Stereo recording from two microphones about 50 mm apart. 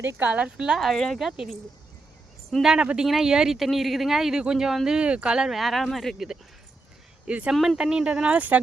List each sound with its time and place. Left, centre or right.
0.2 s speech: right
0.5 s speech: centre
0.9 s speech: centre
1.2 s speech: centre
2.6 s speech: centre
4.9 s speech: right
5.5 s speech: centre
7.3 s speech: right